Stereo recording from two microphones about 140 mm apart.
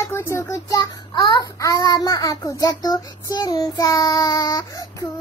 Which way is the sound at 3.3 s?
25° left (ahead or behind).